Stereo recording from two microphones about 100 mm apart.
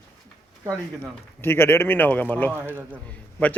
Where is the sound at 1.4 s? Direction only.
20° left (ahead or behind).